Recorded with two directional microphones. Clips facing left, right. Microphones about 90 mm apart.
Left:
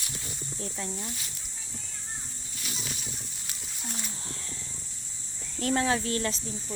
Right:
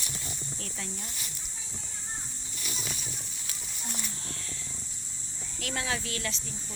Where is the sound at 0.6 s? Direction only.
25° left (ahead or behind).